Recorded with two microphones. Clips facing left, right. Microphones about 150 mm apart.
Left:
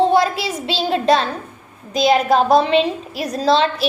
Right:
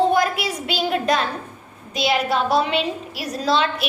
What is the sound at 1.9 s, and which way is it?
A woman's voice, 40° left (ahead or behind).